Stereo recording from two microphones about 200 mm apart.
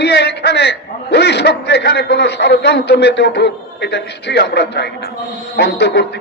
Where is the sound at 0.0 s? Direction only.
55° left (ahead or behind).